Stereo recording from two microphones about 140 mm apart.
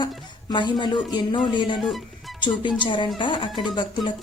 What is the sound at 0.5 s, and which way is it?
Speech, 35° left (ahead or behind).